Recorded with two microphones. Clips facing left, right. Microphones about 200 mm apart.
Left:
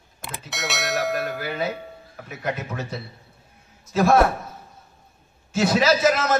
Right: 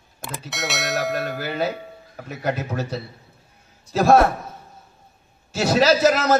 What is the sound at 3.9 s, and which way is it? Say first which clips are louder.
Speech: even; 30° right (ahead or behind).